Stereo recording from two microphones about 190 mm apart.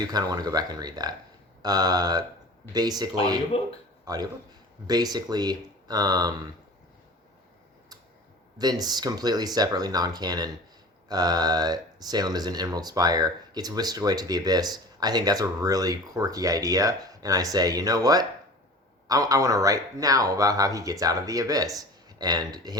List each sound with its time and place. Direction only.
0.1 s a man's voice: 20° right (ahead or behind)
8.5 s speech: 20° right (ahead or behind)